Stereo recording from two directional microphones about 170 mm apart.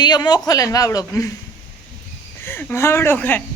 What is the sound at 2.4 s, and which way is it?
A woman's voice, 15° left (ahead or behind).